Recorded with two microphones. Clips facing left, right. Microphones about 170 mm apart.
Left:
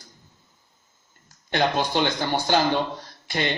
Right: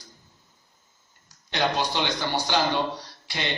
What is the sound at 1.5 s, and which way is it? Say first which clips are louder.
Speech: left 3 dB; 50° left (ahead or behind).